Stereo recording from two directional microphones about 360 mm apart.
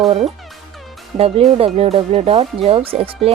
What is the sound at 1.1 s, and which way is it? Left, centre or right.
Speech, centre.